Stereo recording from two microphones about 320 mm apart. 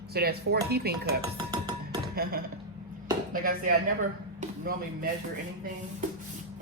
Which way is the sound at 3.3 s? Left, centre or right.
Right.